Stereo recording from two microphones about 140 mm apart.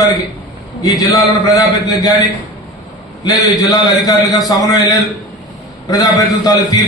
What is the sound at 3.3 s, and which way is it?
A man's voice, 25° left (ahead or behind).